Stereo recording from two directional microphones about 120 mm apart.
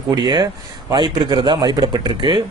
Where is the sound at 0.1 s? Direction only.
40° right (ahead or behind).